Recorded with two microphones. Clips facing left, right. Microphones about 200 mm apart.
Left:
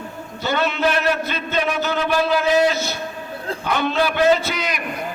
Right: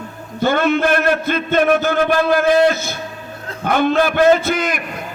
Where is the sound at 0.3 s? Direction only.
50° right (ahead or behind).